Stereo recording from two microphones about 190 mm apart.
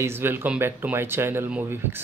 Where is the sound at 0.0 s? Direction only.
10° right (ahead or behind).